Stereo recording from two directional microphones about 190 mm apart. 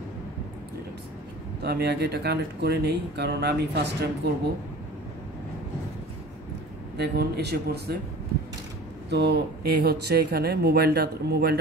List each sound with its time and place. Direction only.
1.6 s speech: 60° right (ahead or behind)
7.0 s speech: 60° right (ahead or behind)
9.1 s speech: 60° right (ahead or behind)